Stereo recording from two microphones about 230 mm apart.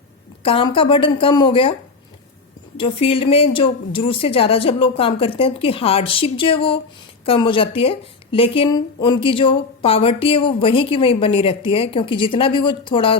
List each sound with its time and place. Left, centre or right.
0.4 s speech: left
2.7 s speech: left